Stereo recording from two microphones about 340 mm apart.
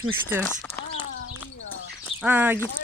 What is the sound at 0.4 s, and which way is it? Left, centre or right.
Speech, centre.